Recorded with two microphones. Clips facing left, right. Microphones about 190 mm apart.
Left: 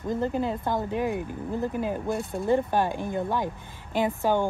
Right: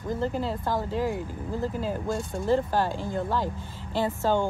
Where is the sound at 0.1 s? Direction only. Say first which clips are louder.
Left 2 dB; 20° left (ahead or behind).